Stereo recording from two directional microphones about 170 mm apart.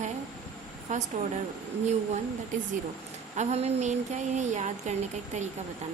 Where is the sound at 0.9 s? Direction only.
45° right (ahead or behind).